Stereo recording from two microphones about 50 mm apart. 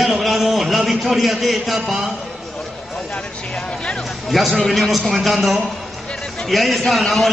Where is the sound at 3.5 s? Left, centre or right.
Centre.